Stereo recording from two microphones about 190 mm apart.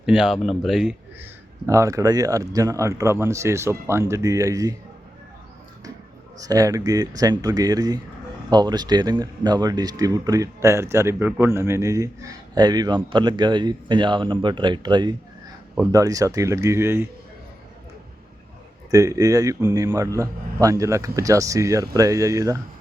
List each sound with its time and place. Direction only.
0.0 s speech: 5° right (ahead or behind)
6.4 s speech: 20° right (ahead or behind)
18.9 s speech: 15° right (ahead or behind)